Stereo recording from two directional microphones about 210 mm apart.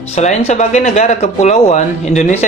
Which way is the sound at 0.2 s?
30° left (ahead or behind).